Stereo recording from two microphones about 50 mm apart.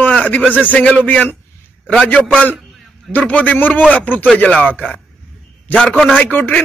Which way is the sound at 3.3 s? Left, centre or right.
Left.